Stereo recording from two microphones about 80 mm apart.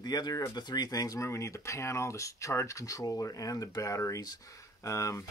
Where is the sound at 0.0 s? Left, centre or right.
Left.